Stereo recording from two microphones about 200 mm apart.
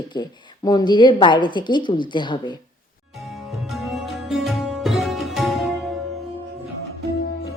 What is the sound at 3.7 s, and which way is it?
Sitar, centre (ahead or behind).